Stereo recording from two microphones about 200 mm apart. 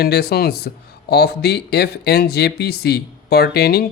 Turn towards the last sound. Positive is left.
turn(degrees=50)  # may be behind; listen again after turning